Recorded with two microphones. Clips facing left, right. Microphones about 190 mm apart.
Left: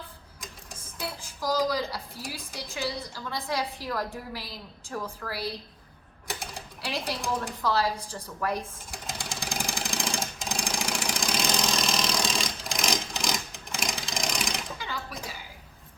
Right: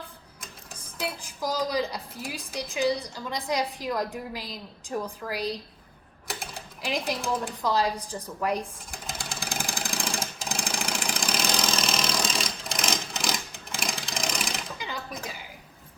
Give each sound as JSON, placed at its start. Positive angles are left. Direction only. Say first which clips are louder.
{"t": 0.9, "sound": "dishes", "louder": "right 3 dB", "side_deg": -15}
{"t": 1.7, "sound": "a woman's voice", "louder": "right 2 dB", "side_deg": -20}
{"t": 6.8, "sound": "a woman's voice", "louder": "right 3 dB", "side_deg": -15}
{"t": 8.9, "sound": "vehicle", "louder": "even", "side_deg": 0}
{"t": 14.8, "sound": "a sound", "louder": "right 1 dB", "side_deg": -15}